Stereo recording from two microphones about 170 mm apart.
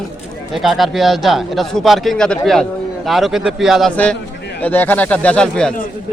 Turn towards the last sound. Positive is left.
turn(degrees=5)  # may be behind; listen again after turning